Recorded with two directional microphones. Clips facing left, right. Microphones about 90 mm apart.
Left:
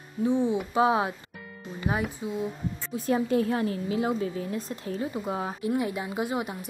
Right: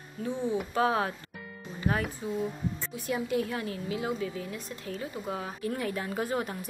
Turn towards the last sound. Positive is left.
turn(degrees=15)  # may be behind; listen again after turning